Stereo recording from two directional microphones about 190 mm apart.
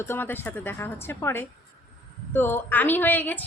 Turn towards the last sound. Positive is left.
turn(degrees=10)  # may be behind; listen again after turning